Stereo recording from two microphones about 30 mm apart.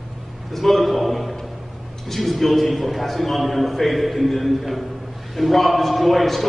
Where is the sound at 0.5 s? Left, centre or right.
Centre.